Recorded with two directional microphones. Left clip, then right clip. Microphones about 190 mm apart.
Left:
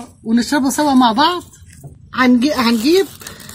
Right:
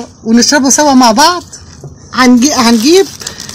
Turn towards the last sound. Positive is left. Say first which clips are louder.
# right 7 dB
turn(degrees=-45)  # may be behind; listen again after turning